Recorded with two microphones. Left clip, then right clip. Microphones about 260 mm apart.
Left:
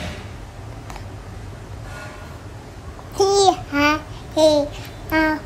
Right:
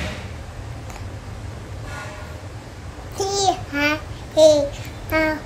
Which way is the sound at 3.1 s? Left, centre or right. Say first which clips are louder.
Left 5 dB; centre.